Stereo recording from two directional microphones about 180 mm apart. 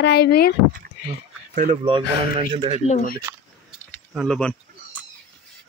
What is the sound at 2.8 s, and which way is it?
Speech, 40° left (ahead or behind).